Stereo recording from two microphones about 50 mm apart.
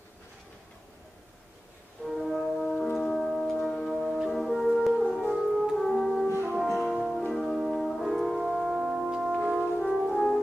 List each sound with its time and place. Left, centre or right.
2.0 s brass instrument: centre
3.2 s music: centre
4.7 s french horn: centre
5.1 s music: centre
5.5 s music: centre
5.9 s music: centre
7.4 s brass instrument: centre
7.7 s brass instrument: centre
8.4 s music: centre
9.4 s brass instrument: centre
9.8 s french horn: centre